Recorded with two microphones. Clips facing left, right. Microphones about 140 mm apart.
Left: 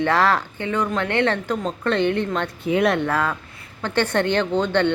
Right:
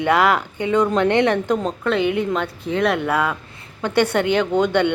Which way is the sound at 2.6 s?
5° left (ahead or behind).